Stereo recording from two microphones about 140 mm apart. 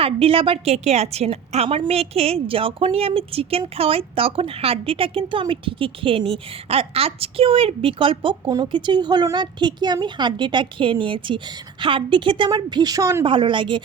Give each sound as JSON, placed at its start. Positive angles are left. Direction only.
{"t": 0.0, "sound": "a woman's voice", "side_deg": -40}
{"t": 13.2, "sound": "a woman's voice", "side_deg": -35}